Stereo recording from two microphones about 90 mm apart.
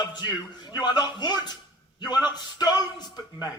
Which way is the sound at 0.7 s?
50° left (ahead or behind).